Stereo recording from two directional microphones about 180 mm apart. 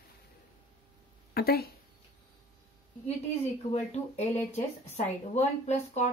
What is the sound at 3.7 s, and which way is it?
Speech, 40° left (ahead or behind).